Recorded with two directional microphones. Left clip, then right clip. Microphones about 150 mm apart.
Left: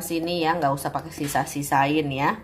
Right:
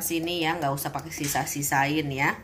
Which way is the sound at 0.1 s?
40° left (ahead or behind).